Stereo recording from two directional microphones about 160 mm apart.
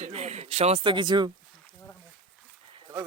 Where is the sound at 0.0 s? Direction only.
45° right (ahead or behind); by 1.3 s 30° right (ahead or behind).